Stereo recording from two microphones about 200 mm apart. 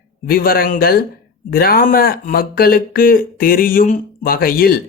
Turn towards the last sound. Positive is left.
turn(degrees=45)  # may be behind; listen again after turning